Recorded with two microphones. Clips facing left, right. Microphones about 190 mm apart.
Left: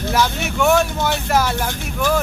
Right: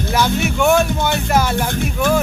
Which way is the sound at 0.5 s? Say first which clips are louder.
Even; centre (ahead or behind).